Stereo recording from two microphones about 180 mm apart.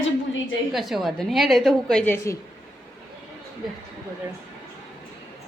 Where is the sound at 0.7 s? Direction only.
Centre (ahead or behind); by 2.4 s 15° left (ahead or behind).